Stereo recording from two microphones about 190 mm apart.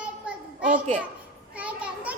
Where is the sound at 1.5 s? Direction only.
5° right (ahead or behind).